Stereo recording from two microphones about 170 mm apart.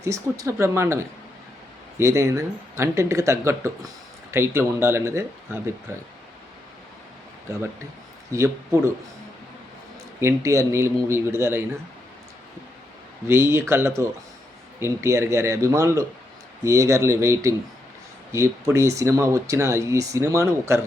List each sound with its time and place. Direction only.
0.0 s speech: 20° right (ahead or behind)
2.0 s speech: 15° right (ahead or behind)
8.3 s speech: 15° right (ahead or behind)
10.2 s speech: 15° right (ahead or behind)
13.2 s speech: 15° right (ahead or behind)